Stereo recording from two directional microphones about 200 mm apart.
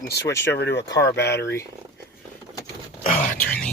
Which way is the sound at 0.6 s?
55° left (ahead or behind).